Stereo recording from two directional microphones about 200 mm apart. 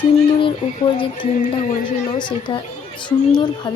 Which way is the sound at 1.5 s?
35° left (ahead or behind).